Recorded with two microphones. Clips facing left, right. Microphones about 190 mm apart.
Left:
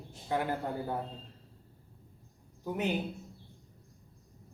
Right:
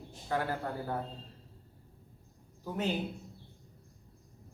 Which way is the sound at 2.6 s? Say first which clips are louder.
Left 1 dB; 15° left (ahead or behind).